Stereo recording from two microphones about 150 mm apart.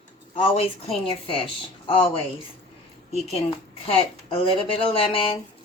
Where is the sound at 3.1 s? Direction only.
45° left (ahead or behind).